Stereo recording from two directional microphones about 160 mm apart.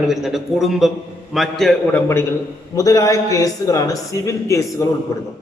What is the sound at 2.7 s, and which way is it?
Speech, 20° left (ahead or behind).